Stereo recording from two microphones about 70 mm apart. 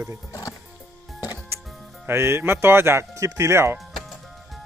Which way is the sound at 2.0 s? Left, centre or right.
Right.